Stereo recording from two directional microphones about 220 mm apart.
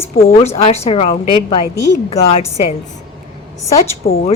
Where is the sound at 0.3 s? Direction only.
30° left (ahead or behind).